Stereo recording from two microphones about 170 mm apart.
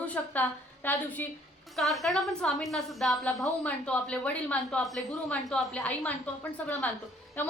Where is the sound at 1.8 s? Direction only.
Centre (ahead or behind).